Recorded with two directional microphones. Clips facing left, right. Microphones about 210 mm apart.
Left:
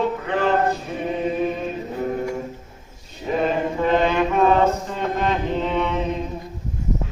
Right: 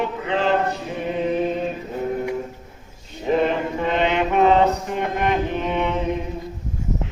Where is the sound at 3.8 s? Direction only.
20° right (ahead or behind).